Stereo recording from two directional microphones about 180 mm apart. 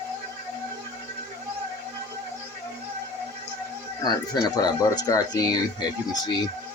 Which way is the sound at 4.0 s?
25° left (ahead or behind).